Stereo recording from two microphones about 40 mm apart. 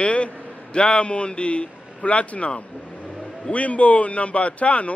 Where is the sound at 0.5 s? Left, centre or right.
Left.